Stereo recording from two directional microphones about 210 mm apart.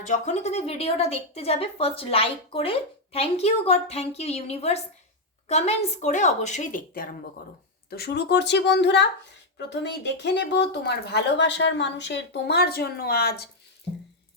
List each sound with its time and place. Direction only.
0.0 s speech: 35° left (ahead or behind)